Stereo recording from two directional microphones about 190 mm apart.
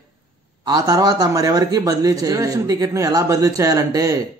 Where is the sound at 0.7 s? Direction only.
20° right (ahead or behind).